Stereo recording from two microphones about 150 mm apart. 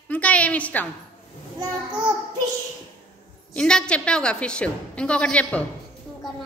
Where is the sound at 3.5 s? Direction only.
5° left (ahead or behind).